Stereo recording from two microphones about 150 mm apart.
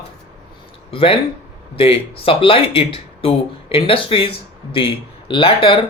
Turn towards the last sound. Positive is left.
turn(degrees=35)  # may be behind; listen again after turning